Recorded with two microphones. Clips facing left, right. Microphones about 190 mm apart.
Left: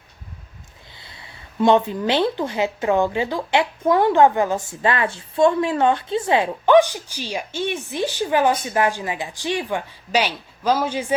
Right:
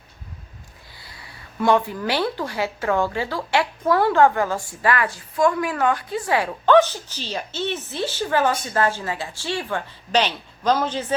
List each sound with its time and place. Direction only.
0.9 s speech: 25° left (ahead or behind)